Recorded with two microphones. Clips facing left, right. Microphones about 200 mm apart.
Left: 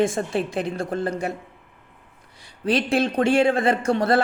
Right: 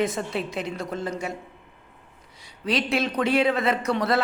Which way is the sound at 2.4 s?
50° left (ahead or behind).